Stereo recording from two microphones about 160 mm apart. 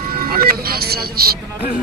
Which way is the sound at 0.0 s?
70° right (ahead or behind).